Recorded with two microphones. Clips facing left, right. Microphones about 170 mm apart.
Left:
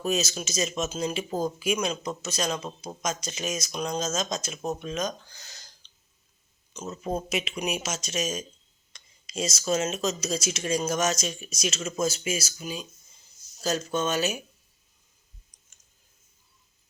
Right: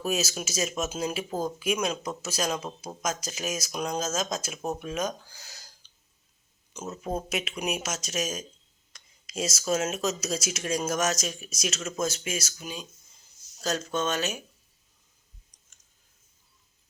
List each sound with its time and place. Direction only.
0.0 s speech: 5° right (ahead or behind)
6.7 s speech: 10° right (ahead or behind)
15.5 s clicking: 5° left (ahead or behind)